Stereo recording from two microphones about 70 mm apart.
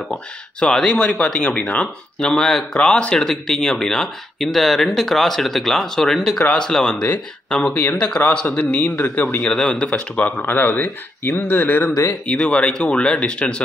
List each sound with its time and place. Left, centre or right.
0.1 s speech: centre
7.7 s speech: left
9.4 s speech: centre; by 11.9 s left
12.3 s speech: centre